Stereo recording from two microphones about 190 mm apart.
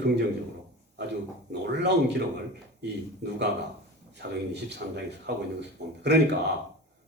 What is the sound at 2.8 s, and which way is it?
Speech, 65° right (ahead or behind).